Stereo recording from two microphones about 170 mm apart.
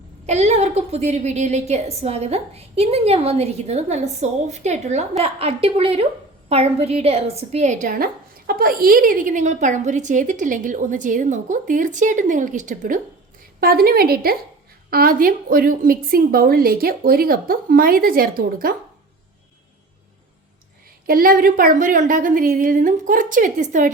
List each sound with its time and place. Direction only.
0.3 s a woman's voice: 40° right (ahead or behind)
13.6 s a woman's voice: 60° right (ahead or behind)
21.1 s a woman's voice: 55° right (ahead or behind)